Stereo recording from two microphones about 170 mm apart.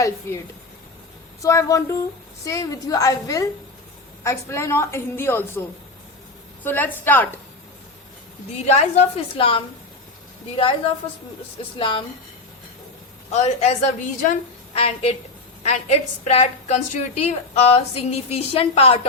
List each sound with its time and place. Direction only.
1.4 s a woman's voice: 20° left (ahead or behind)
8.6 s a woman's voice: 40° left (ahead or behind)
11.8 s a woman's voice: 30° left (ahead or behind)
13.3 s a woman's voice: 40° left (ahead or behind)